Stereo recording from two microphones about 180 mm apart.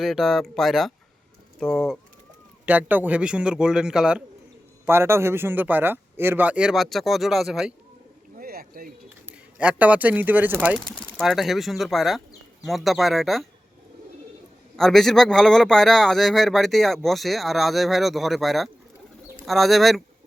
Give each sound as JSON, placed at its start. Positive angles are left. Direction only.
{"t": 0.0, "sound": "speech", "side_deg": 0}
{"t": 2.6, "sound": "speech", "side_deg": -10}
{"t": 8.4, "sound": "bird", "side_deg": -55}
{"t": 9.6, "sound": "speech", "side_deg": -5}
{"t": 14.8, "sound": "speech", "side_deg": 0}